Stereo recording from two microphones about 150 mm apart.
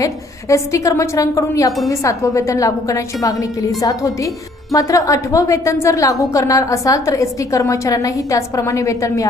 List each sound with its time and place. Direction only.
0.0 s a woman's voice: 20° left (ahead or behind)